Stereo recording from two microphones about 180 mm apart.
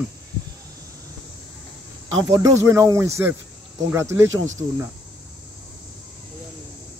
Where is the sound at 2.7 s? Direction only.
15° right (ahead or behind).